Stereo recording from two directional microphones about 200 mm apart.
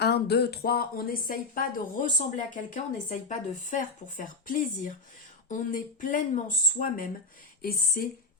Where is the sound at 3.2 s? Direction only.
40° left (ahead or behind).